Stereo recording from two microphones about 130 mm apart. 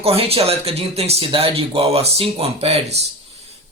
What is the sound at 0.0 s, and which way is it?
Speech, 50° right (ahead or behind).